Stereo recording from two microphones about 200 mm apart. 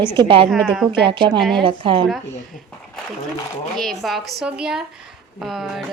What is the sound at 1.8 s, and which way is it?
Speech, 25° right (ahead or behind).